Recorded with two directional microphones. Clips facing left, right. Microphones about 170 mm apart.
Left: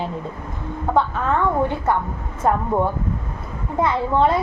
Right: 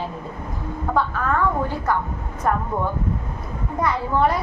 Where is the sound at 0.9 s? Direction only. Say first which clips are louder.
Left 2 dB; 25° left (ahead or behind).